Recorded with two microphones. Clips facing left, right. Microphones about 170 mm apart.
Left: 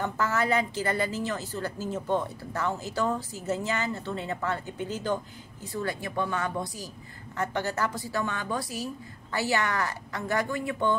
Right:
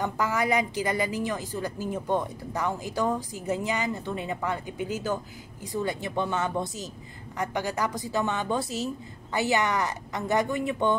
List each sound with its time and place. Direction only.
0.0 s a woman's voice: 15° right (ahead or behind)
7.3 s a woman's voice: 15° right (ahead or behind)